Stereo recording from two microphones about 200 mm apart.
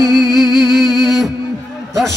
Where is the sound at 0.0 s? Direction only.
20° left (ahead or behind).